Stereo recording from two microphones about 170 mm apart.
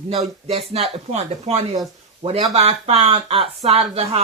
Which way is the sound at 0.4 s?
35° right (ahead or behind).